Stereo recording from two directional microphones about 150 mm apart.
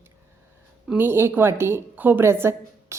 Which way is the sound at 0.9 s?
15° right (ahead or behind).